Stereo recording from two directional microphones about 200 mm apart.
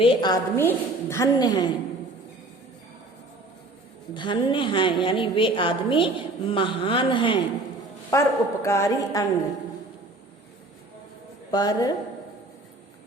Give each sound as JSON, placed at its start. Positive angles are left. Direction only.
{"t": 0.0, "sound": "a woman's voice", "side_deg": 25}
{"t": 4.1, "sound": "a woman's voice", "side_deg": 25}
{"t": 8.1, "sound": "a woman's voice", "side_deg": 15}
{"t": 11.5, "sound": "a woman's voice", "side_deg": 20}